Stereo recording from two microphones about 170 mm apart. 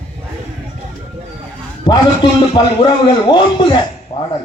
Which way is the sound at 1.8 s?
30° left (ahead or behind).